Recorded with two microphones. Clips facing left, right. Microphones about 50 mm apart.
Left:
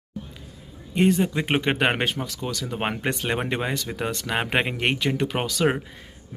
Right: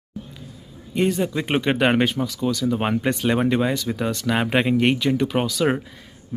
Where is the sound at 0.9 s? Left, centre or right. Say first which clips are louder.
Even; left.